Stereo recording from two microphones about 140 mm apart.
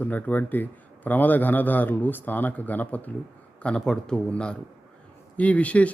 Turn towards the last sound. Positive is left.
turn(degrees=10)  # may be behind; listen again after turning